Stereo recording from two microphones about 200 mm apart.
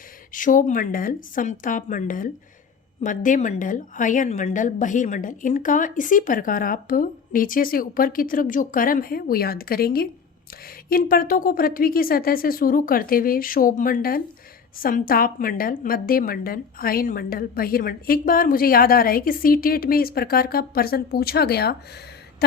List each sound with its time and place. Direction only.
0.3 s a woman's voice: 40° left (ahead or behind)